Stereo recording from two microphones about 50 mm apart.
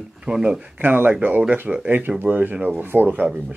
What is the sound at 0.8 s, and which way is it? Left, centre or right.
Speech, right.